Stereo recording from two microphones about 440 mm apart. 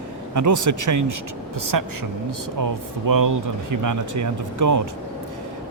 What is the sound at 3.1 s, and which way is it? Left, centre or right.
Speech, right.